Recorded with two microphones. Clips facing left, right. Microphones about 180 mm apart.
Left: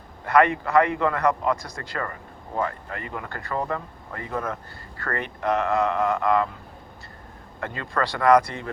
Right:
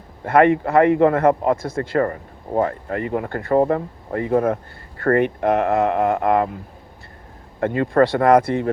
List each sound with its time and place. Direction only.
0.3 s speech: 50° right (ahead or behind)
1.6 s speech: 25° right (ahead or behind)
2.6 s speech: 45° right (ahead or behind)
7.6 s speech: 50° right (ahead or behind)